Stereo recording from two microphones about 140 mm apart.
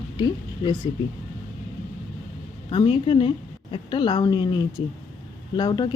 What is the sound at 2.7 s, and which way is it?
Speech, 40° left (ahead or behind).